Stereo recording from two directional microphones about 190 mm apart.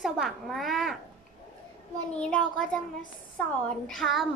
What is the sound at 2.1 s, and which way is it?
A woman's voice, 5° left (ahead or behind).